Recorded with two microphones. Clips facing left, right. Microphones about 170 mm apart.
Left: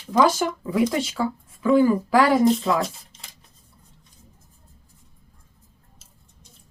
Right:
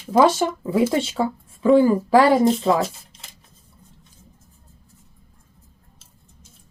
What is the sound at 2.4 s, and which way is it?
Speech, centre (ahead or behind).